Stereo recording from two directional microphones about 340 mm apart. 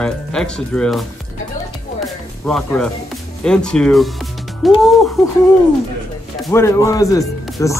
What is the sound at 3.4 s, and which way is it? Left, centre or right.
Speech, centre.